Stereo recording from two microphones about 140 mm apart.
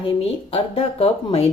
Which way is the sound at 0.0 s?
40° left (ahead or behind).